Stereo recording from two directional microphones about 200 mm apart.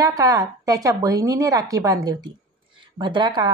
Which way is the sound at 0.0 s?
15° right (ahead or behind).